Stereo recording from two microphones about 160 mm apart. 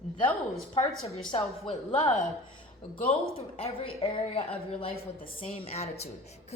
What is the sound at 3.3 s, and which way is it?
Speech, 35° left (ahead or behind).